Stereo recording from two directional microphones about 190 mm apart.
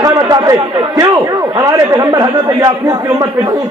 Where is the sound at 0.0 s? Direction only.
20° right (ahead or behind).